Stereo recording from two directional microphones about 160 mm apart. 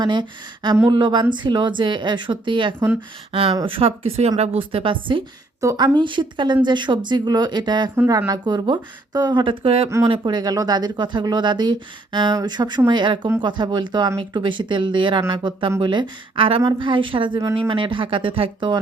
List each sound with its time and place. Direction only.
0.0 s speech: 30° right (ahead or behind)
7.9 s speech: 15° right (ahead or behind); by 18.8 s 30° right (ahead or behind)